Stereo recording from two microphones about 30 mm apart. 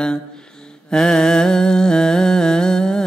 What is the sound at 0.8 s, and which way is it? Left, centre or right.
Humming, left.